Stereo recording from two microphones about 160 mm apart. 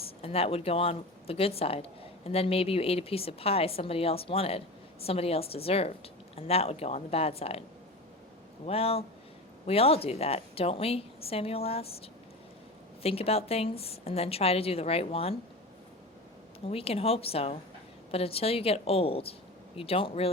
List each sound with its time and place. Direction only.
0.0 s speech: 40° left (ahead or behind)
8.6 s speech: 40° left (ahead or behind)
13.0 s speech: 40° left (ahead or behind)
16.6 s speech: 40° left (ahead or behind)